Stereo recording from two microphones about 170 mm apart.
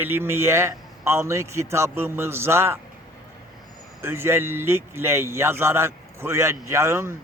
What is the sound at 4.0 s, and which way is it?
A man's voice, 15° right (ahead or behind).